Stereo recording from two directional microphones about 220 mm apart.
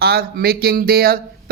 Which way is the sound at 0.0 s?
45° right (ahead or behind).